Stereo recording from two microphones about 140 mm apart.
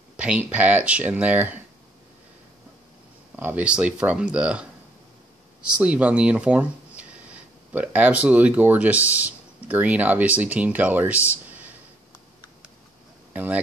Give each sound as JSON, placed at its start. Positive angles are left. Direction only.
{"t": 0.2, "sound": "speech", "side_deg": -10}
{"t": 3.3, "sound": "speech", "side_deg": -10}
{"t": 7.7, "sound": "speech", "side_deg": -10}
{"t": 13.3, "sound": "speech", "side_deg": -10}